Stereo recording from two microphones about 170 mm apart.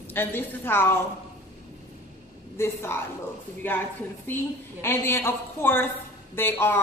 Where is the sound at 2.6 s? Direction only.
15° left (ahead or behind).